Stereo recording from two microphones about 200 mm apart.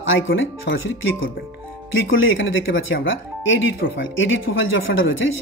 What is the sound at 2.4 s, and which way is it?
Speech, 70° left (ahead or behind).